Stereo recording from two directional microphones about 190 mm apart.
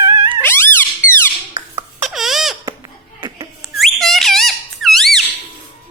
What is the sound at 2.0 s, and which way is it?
Squeak, centre (ahead or behind).